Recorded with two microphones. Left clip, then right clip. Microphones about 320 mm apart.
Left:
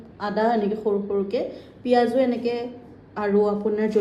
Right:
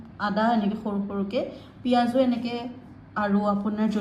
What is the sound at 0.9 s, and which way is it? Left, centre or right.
Speech, right.